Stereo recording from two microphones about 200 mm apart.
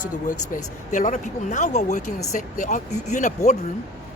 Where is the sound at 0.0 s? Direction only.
40° left (ahead or behind).